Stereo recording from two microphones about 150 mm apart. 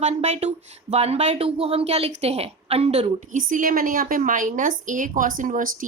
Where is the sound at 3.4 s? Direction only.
65° right (ahead or behind).